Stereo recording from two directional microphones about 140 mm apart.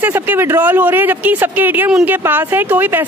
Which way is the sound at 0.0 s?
15° right (ahead or behind).